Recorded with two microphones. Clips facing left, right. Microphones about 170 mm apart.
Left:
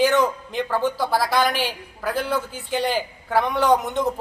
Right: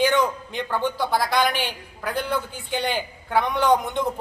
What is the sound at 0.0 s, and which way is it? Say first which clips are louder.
Speech: left 2 dB; centre (ahead or behind).